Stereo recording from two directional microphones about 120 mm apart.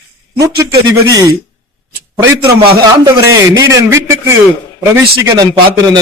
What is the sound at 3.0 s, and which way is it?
Speech, 35° right (ahead or behind).